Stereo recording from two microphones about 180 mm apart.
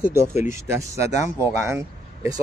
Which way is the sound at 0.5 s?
15° right (ahead or behind).